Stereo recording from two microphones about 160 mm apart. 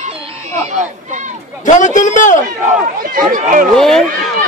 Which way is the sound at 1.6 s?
50° left (ahead or behind).